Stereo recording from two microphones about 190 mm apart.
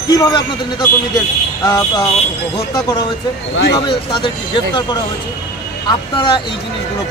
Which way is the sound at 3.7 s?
25° left (ahead or behind).